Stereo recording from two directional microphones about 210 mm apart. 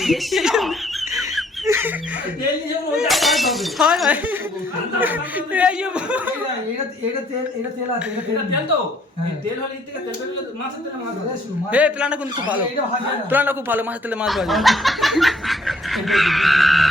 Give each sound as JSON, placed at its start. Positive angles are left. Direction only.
{"t": 0.0, "sound": "snicker", "side_deg": 0}
{"t": 1.6, "sound": "chicken", "side_deg": -10}
{"t": 2.9, "sound": "speech", "side_deg": 0}
{"t": 11.7, "sound": "speech", "side_deg": -5}